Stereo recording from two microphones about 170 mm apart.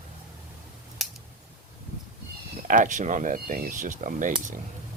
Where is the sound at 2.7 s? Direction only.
50° right (ahead or behind).